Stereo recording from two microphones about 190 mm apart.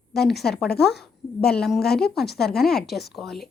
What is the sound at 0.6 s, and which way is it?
Speech, 55° left (ahead or behind).